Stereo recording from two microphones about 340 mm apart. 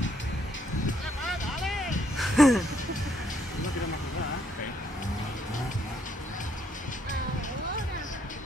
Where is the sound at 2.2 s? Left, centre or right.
Centre.